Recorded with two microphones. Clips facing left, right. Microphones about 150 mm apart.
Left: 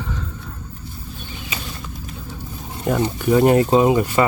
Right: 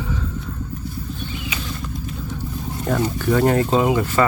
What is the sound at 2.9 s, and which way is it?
Speech, 15° left (ahead or behind).